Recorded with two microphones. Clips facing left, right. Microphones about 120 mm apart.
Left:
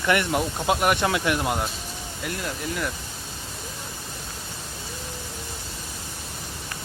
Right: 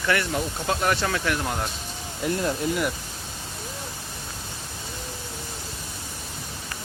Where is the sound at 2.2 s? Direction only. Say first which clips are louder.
Right 6 dB; 30° right (ahead or behind).